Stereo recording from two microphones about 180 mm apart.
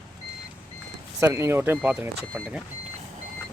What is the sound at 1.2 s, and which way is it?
Speech, 15° right (ahead or behind).